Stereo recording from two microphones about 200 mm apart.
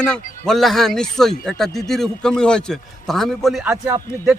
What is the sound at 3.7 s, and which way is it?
Speech, 15° right (ahead or behind).